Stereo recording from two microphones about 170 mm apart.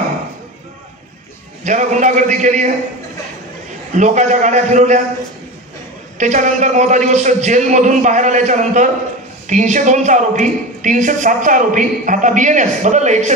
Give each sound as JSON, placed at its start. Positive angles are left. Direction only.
{"t": 1.6, "sound": "a woman's voice", "side_deg": -45}
{"t": 3.9, "sound": "a woman's voice", "side_deg": -45}
{"t": 6.1, "sound": "a woman's voice", "side_deg": -45}